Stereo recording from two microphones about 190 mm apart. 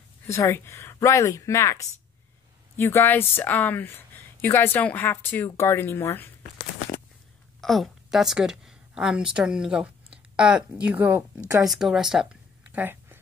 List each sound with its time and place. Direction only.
0.3 s a woman's voice: 15° left (ahead or behind)
7.6 s a woman's voice: centre (ahead or behind)